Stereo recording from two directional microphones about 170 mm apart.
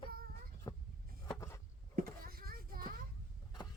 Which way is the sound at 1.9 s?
60° right (ahead or behind).